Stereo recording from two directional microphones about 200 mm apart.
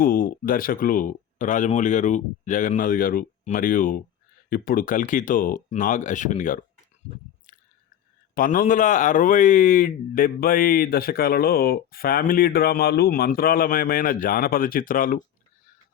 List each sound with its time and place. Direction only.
0.0 s speech: 45° left (ahead or behind)
8.4 s speech: 40° left (ahead or behind)